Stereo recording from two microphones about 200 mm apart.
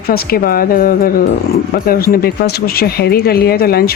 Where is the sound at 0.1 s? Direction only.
50° left (ahead or behind).